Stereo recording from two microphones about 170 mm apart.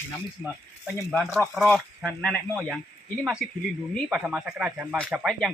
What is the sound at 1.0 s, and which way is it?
Speech, centre (ahead or behind).